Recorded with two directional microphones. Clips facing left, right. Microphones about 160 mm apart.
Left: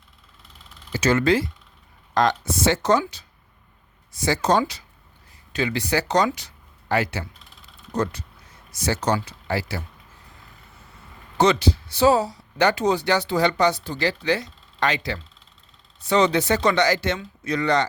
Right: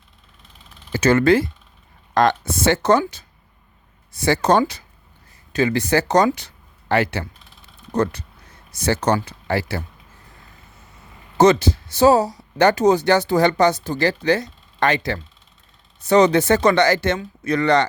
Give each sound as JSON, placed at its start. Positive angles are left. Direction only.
{"t": 0.9, "sound": "speech", "side_deg": -55}
{"t": 4.1, "sound": "speech", "side_deg": -60}
{"t": 11.3, "sound": "speech", "side_deg": -45}